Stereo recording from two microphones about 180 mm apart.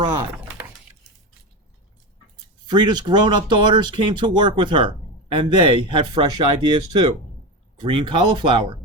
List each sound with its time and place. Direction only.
2.6 s speech: 25° right (ahead or behind)